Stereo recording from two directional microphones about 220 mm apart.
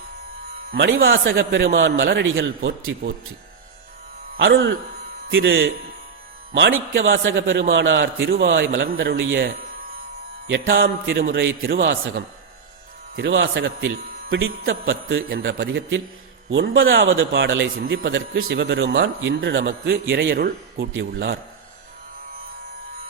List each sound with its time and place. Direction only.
0.7 s a man's voice: 55° right (ahead or behind)
4.4 s a man's voice: 55° right (ahead or behind)
11.2 s a man's voice: 45° right (ahead or behind)
11.7 s a man's voice: 60° right (ahead or behind)
13.1 s a man's voice: 55° right (ahead or behind)
20.7 s a man's voice: 60° right (ahead or behind)